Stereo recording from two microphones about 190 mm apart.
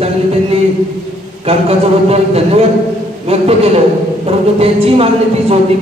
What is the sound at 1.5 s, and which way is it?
A man's voice, 30° right (ahead or behind).